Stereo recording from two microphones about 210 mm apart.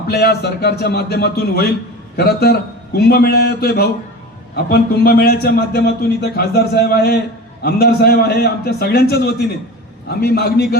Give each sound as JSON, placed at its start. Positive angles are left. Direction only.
{"t": 0.1, "sound": "a man's voice", "side_deg": 50}